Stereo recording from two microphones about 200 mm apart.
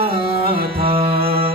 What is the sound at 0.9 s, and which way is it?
Mantra, 25° right (ahead or behind).